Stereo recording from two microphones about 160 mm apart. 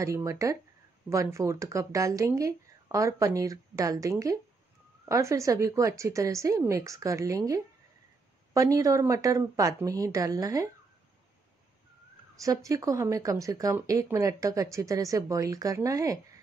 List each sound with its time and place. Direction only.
0.0 s speech: 20° right (ahead or behind)
12.4 s speech: 20° right (ahead or behind)